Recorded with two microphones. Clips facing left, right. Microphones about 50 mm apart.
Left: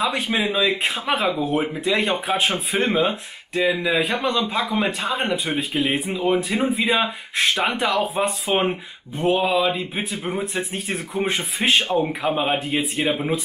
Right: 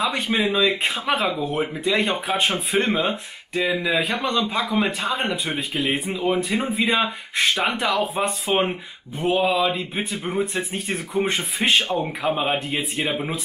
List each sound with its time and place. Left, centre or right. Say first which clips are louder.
0.0 s speech: even; centre